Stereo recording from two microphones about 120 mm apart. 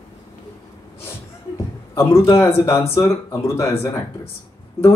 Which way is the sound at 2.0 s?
25° left (ahead or behind).